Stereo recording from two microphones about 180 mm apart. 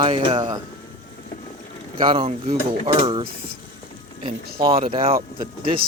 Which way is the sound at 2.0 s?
30° right (ahead or behind).